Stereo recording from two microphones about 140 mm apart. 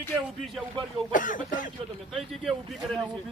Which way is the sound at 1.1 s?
70° left (ahead or behind).